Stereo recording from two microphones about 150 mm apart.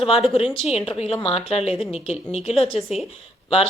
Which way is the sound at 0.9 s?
40° left (ahead or behind).